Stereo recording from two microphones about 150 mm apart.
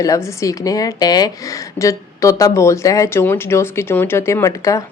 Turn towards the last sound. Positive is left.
turn(degrees=20)  # may be behind; listen again after turning